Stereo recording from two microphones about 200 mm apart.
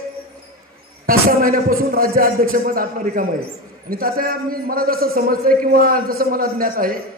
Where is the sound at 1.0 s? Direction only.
45° right (ahead or behind).